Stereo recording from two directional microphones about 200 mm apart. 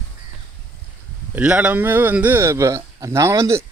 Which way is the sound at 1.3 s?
5° right (ahead or behind).